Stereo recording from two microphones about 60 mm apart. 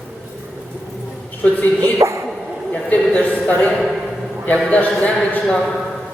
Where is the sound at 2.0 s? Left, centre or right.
Right.